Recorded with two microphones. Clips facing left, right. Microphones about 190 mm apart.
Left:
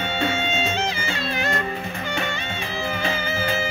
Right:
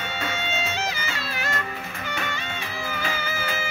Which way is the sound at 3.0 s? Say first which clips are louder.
Left 4 dB; 25° left (ahead or behind).